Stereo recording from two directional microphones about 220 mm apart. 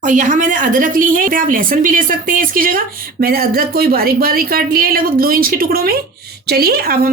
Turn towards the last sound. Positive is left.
turn(degrees=-40)  # may be behind; listen again after turning